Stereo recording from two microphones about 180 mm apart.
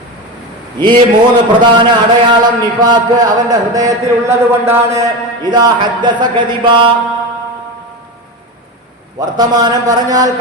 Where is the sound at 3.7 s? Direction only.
20° right (ahead or behind).